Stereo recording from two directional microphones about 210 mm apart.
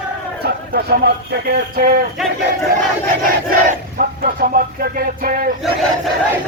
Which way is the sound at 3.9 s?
40° right (ahead or behind).